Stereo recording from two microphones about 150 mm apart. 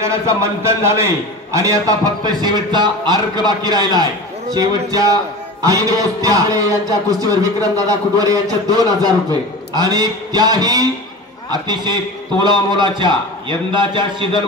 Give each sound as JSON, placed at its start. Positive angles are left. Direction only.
{"t": 0.0, "sound": "a man's voice", "side_deg": -20}